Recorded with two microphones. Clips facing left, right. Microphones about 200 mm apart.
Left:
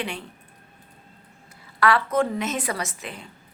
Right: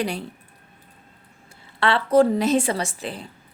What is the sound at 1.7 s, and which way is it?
A woman's voice, 30° right (ahead or behind).